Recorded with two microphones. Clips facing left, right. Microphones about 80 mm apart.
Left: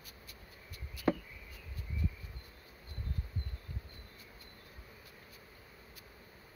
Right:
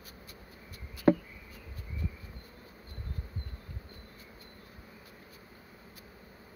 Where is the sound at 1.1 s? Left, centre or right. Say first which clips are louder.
Right 8 dB; right.